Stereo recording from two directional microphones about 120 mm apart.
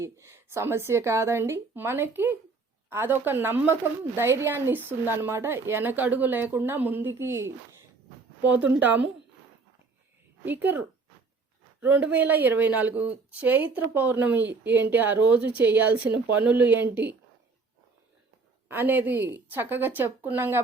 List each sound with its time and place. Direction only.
0.0 s speech: 20° right (ahead or behind)
10.4 s speech: 15° right (ahead or behind)
18.7 s speech: 15° right (ahead or behind)